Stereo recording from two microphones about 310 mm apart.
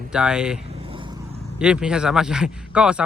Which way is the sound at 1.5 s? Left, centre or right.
Centre.